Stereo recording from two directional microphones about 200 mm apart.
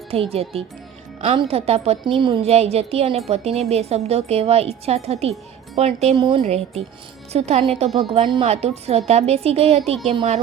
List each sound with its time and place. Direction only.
0.1 s speech: 30° right (ahead or behind)